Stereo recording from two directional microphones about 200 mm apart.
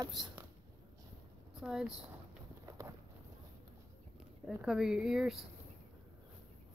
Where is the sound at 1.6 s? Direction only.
5° right (ahead or behind).